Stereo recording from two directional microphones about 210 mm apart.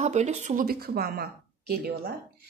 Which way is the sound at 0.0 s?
30° right (ahead or behind).